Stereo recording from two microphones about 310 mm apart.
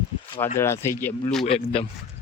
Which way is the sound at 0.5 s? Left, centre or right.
Centre.